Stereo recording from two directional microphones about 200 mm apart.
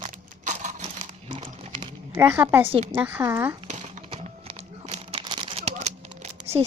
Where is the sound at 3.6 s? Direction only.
35° right (ahead or behind).